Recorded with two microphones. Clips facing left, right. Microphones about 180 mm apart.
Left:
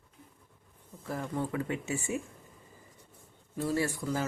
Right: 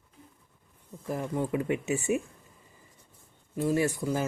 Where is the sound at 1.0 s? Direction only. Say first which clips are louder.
Right 3 dB; 15° right (ahead or behind).